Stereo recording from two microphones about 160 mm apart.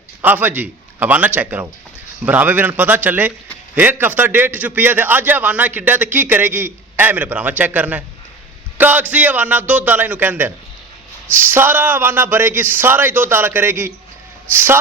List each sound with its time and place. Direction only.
0.2 s a man's voice: 10° right (ahead or behind)